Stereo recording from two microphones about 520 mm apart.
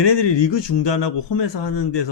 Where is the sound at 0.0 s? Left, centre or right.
Left.